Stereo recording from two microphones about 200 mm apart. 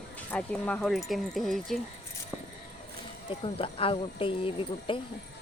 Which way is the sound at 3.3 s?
25° left (ahead or behind).